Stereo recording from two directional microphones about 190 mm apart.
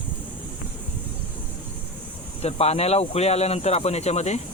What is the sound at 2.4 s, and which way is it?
Speech, 35° left (ahead or behind).